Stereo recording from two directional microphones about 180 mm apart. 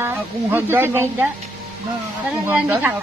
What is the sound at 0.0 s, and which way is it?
Speech, 10° right (ahead or behind).